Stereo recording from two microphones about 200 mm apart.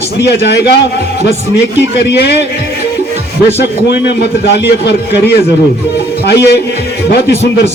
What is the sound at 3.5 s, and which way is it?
A man's voice, 55° left (ahead or behind).